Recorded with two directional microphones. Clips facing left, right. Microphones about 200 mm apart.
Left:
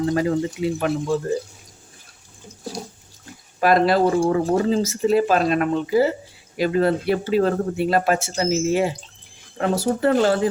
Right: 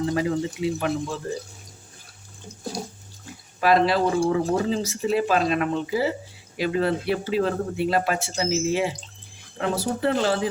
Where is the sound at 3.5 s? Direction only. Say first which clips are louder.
Left 3 dB; 45° left (ahead or behind).